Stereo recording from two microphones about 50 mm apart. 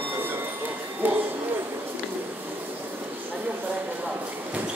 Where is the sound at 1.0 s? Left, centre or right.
Right.